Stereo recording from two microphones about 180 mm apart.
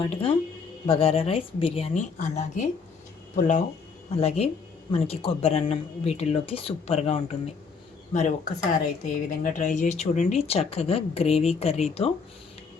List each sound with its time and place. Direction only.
0.0 s speech: 30° left (ahead or behind)